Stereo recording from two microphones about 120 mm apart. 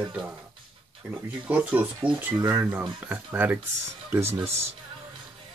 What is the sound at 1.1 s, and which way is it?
Speech, 10° right (ahead or behind).